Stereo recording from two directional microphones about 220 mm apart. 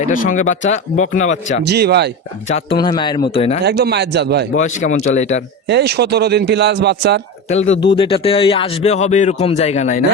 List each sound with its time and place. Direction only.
0.0 s speech: 35° left (ahead or behind)
1.6 s speech: 50° right (ahead or behind)
2.5 s a man's voice: 30° left (ahead or behind)
2.7 s a man's voice: 20° left (ahead or behind)
3.6 s speech: 50° right (ahead or behind)
4.5 s speech: 35° left (ahead or behind)
5.6 s speech: 50° right (ahead or behind)
7.4 s a man's voice: 30° left (ahead or behind)